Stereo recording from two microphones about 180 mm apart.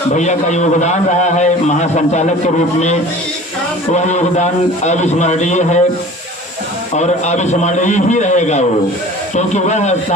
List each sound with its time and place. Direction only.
0.1 s a man's voice: 40° left (ahead or behind)
3.9 s a man's voice: 40° left (ahead or behind)
6.9 s a man's voice: 40° left (ahead or behind)